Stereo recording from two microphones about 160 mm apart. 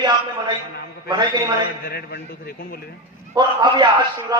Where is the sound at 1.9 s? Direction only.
75° left (ahead or behind).